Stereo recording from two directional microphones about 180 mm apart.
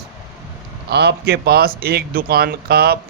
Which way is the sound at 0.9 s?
65° right (ahead or behind).